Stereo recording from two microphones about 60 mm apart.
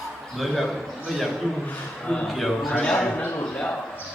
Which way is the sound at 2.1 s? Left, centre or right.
Centre.